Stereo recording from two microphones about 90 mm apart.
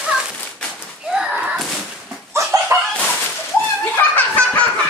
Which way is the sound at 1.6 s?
Centre (ahead or behind).